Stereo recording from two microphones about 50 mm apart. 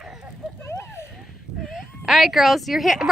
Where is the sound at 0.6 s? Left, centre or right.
Left.